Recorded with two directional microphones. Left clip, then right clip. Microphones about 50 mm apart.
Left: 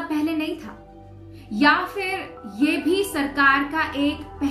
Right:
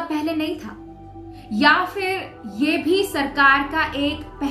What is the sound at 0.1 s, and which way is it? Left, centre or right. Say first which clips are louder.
Music: left 1 dB; right.